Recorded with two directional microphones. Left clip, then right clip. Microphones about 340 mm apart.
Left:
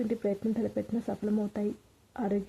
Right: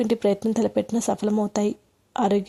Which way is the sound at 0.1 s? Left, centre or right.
Right.